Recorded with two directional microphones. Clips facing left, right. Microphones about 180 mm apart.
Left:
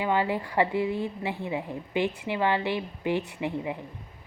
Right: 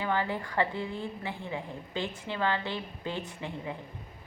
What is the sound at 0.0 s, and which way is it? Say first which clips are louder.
A woman's voice: left 4 dB; 15° left (ahead or behind).